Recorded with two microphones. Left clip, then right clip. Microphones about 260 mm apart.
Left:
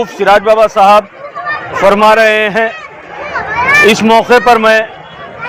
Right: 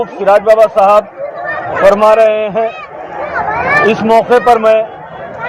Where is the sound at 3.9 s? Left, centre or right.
Left.